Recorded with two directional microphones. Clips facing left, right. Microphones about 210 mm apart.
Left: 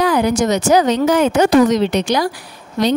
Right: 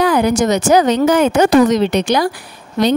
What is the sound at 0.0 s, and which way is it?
Speech, 55° right (ahead or behind).